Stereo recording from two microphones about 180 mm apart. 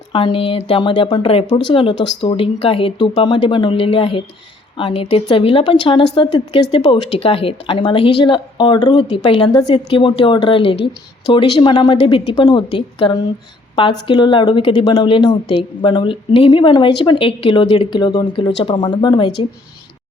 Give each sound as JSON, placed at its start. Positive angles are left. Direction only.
{"t": 0.1, "sound": "speech", "side_deg": 30}